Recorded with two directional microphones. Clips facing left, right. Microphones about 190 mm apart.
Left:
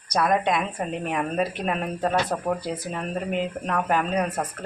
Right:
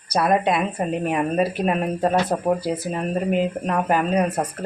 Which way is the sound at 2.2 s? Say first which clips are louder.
Right 5 dB; 20° right (ahead or behind).